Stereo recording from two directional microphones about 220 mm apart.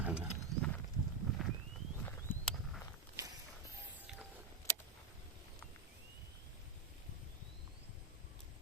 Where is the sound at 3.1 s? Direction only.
15° right (ahead or behind).